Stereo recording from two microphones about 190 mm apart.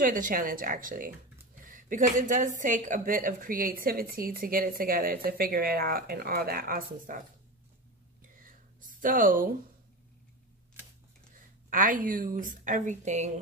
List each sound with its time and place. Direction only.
0.0 s a woman's voice: 45° right (ahead or behind)
9.0 s a woman's voice: 45° right (ahead or behind)
11.7 s a woman's voice: 45° right (ahead or behind)